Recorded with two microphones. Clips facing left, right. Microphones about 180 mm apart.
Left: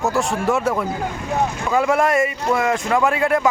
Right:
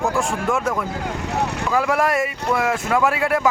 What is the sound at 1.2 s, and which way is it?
Speech, 70° right (ahead or behind).